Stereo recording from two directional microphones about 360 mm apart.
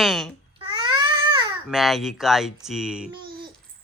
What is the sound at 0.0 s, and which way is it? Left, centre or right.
Babbling, centre.